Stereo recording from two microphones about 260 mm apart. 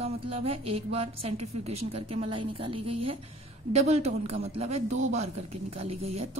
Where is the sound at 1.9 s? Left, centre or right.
Right.